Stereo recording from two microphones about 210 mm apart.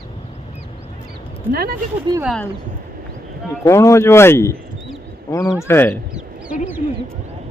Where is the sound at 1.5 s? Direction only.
45° right (ahead or behind).